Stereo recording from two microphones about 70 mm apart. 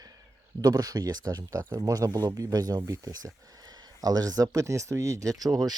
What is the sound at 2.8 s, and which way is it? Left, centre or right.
Speech, right.